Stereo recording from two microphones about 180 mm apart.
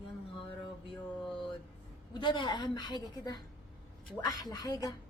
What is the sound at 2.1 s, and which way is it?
A woman's voice, 25° left (ahead or behind).